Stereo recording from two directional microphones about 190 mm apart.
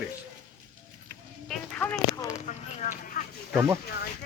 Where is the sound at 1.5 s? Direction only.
5° left (ahead or behind).